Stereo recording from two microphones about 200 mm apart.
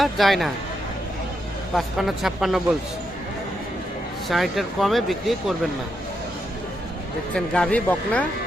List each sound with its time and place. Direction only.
0.0 s speech: centre (ahead or behind)
1.7 s speech: centre (ahead or behind)
4.3 s speech: centre (ahead or behind)
7.3 s speech: 5° left (ahead or behind)